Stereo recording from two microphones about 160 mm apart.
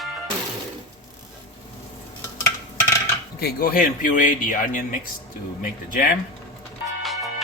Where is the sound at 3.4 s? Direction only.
75° left (ahead or behind).